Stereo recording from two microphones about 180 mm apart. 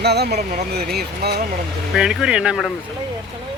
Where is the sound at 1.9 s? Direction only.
5° right (ahead or behind).